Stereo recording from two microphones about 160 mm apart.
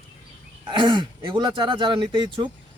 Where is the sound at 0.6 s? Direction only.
30° right (ahead or behind).